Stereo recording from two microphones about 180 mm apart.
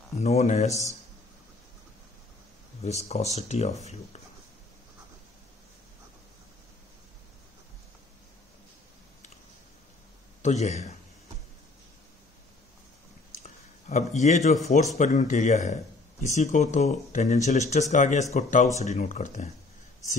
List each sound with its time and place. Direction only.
0.2 s speech: 40° left (ahead or behind)
0.7 s a man's voice: 20° left (ahead or behind)
2.8 s speech: 35° left (ahead or behind)
10.4 s speech: 40° left (ahead or behind)
13.3 s a sound: 40° left (ahead or behind)
15.0 s speech: 40° left (ahead or behind)